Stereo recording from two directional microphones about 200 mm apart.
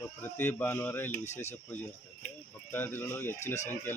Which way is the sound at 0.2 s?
10° left (ahead or behind).